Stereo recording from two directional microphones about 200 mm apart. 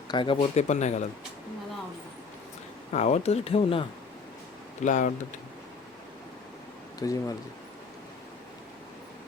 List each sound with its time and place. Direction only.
0.1 s speech: 25° left (ahead or behind)
2.9 s speech: 35° left (ahead or behind)
4.8 s speech: 40° left (ahead or behind)
7.0 s speech: 15° left (ahead or behind)